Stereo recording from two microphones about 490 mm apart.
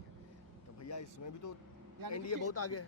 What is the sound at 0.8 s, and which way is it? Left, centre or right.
A man's voice, left.